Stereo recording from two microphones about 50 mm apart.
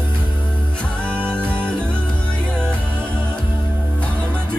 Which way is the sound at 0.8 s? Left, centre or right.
Left.